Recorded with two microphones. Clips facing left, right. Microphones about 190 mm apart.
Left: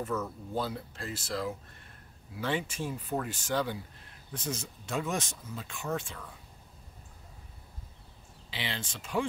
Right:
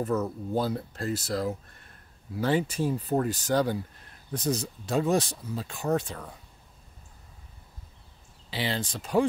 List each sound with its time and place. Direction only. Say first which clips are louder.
0.0 s speech: right 6 dB; 40° right (ahead or behind)
8.5 s speech: right 7 dB; 40° right (ahead or behind)